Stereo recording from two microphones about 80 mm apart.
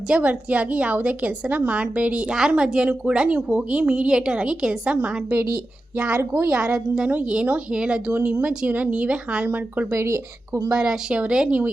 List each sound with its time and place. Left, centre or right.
0.1 s a woman's voice: centre
6.4 s a woman's voice: centre
10.0 s speech: right
10.7 s a woman's voice: centre